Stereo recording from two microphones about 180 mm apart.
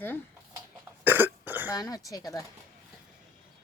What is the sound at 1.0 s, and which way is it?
Cough, 10° right (ahead or behind).